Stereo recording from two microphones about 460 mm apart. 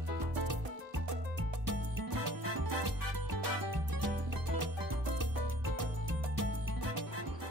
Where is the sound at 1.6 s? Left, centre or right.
Right.